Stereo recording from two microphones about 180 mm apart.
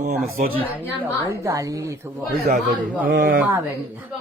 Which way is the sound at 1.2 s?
15° right (ahead or behind).